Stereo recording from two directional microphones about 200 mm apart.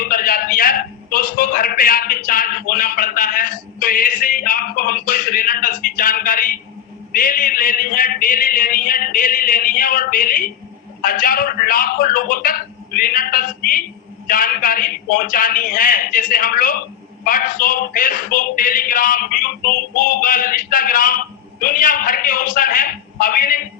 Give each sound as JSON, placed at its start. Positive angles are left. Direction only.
{"t": 0.0, "sound": "a man's voice", "side_deg": 45}